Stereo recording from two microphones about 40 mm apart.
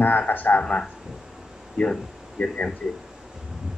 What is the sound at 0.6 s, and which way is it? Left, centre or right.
Speech, left.